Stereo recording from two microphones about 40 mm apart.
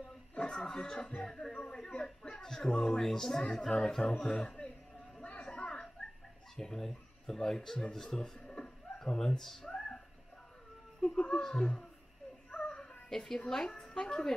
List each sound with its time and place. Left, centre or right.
0.4 s speech: left
4.0 s speech: left
4.3 s speech: centre
5.5 s a sound: left
6.5 s speech: centre
11.1 s speech: left
12.5 s a sound: left
13.5 s speech: centre